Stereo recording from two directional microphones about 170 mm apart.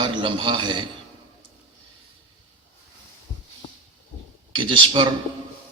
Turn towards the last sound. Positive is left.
turn(degrees=-30)  # may be behind; listen again after turning